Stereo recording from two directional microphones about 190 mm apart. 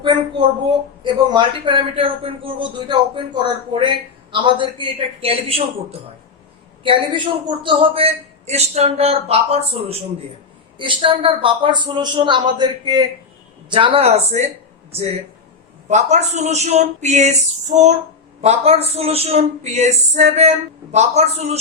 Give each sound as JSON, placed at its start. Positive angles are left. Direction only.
{"t": 0.0, "sound": "a man's voice", "side_deg": -25}